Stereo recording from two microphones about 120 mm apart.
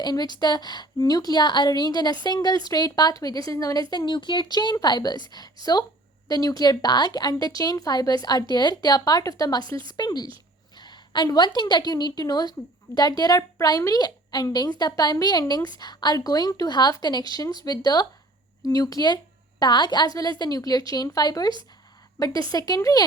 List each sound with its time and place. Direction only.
0.0 s a woman's voice: 35° left (ahead or behind)
6.2 s a woman's voice: 30° left (ahead or behind)